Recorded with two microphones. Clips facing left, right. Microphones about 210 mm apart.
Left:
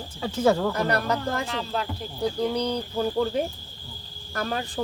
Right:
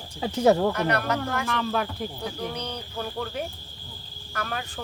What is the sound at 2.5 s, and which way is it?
Speech, 35° left (ahead or behind).